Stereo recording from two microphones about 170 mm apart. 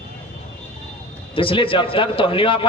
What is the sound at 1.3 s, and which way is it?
A man's voice, 30° left (ahead or behind).